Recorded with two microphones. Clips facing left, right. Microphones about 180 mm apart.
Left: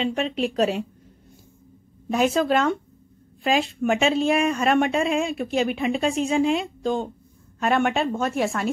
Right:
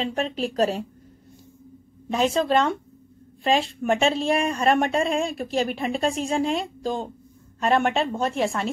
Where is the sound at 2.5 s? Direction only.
Centre (ahead or behind).